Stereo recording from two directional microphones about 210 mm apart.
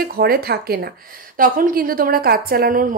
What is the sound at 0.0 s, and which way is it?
A woman's voice, 45° right (ahead or behind).